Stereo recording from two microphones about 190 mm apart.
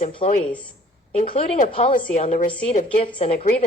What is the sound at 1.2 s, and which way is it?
A woman's voice, 30° left (ahead or behind).